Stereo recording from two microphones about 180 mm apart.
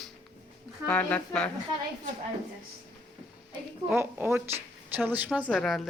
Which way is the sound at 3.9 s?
15° right (ahead or behind).